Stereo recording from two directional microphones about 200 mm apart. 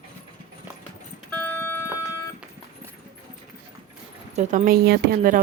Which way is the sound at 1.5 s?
10° left (ahead or behind).